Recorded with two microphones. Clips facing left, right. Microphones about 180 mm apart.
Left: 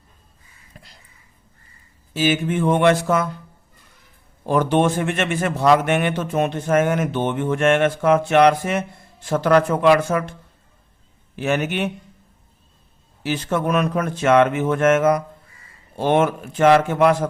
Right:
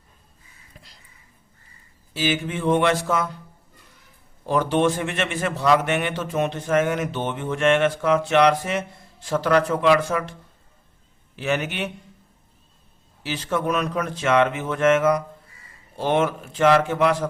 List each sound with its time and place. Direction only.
2.1 s a man's voice: 50° left (ahead or behind)
4.4 s a man's voice: 50° left (ahead or behind)
11.3 s a man's voice: 50° left (ahead or behind)
13.2 s a man's voice: 50° left (ahead or behind)